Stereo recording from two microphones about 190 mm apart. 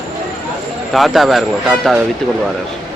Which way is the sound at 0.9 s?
Centre (ahead or behind).